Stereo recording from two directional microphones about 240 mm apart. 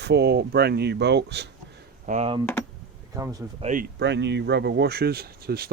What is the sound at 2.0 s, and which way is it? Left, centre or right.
Speech, right.